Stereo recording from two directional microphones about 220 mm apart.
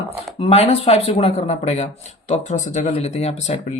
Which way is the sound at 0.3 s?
25° left (ahead or behind).